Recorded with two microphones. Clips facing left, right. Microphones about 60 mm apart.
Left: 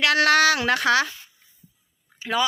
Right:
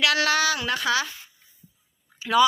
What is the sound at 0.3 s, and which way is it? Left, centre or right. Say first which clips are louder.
Speech: left 5 dB; left.